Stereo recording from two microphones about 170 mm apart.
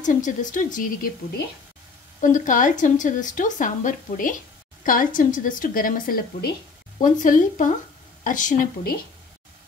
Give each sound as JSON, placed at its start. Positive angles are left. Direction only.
{"t": 0.0, "sound": "a woman's voice", "side_deg": 50}
{"t": 2.2, "sound": "a woman's voice", "side_deg": 50}